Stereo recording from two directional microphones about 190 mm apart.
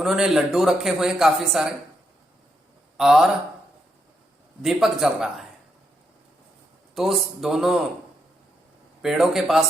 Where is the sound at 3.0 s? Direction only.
Centre (ahead or behind).